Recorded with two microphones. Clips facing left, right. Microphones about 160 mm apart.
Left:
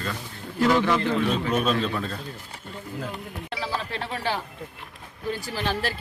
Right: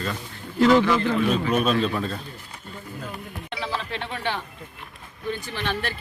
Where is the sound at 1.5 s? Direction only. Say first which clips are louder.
Right 2 dB; 15° right (ahead or behind).